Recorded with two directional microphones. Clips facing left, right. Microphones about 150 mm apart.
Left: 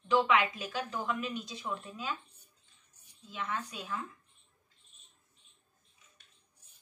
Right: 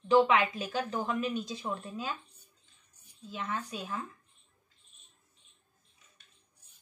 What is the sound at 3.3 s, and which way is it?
Speech, 35° right (ahead or behind).